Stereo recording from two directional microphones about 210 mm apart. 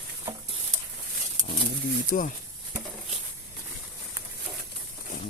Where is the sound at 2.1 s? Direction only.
40° left (ahead or behind).